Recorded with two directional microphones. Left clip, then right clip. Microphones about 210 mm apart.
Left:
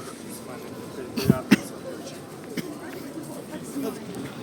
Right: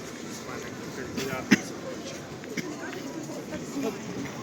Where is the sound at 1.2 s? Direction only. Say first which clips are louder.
Left 9 dB; 25° left (ahead or behind).